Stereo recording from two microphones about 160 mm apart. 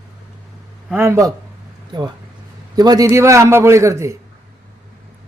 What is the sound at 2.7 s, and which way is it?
A man's voice, 25° right (ahead or behind).